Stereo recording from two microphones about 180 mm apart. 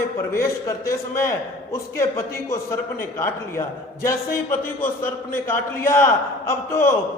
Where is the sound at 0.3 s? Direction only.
15° left (ahead or behind).